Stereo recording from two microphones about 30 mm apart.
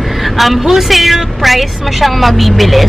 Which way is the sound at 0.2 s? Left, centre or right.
Centre.